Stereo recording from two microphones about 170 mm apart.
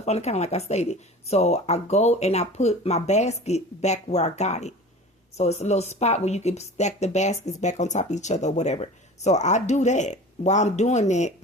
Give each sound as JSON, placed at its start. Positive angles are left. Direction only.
{"t": 0.0, "sound": "speech", "side_deg": 40}